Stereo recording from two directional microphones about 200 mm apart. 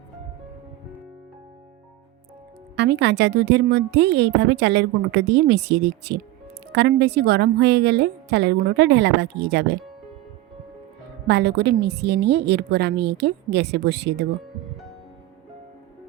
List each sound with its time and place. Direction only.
2.7 s a woman's voice: 60° right (ahead or behind)
11.3 s a woman's voice: 55° right (ahead or behind)